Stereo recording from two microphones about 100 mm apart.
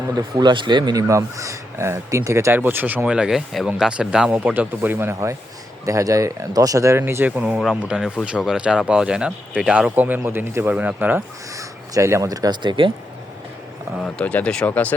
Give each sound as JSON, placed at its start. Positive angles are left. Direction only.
{"t": 0.1, "sound": "speech", "side_deg": -40}
{"t": 7.0, "sound": "speech", "side_deg": -20}
{"t": 9.9, "sound": "speech", "side_deg": -20}
{"t": 11.5, "sound": "speech", "side_deg": -30}
{"t": 14.0, "sound": "speech", "side_deg": 10}